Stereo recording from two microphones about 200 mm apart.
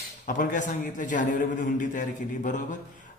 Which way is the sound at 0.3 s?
40° left (ahead or behind).